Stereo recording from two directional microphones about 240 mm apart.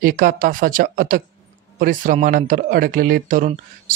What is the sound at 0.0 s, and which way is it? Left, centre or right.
Speech, right.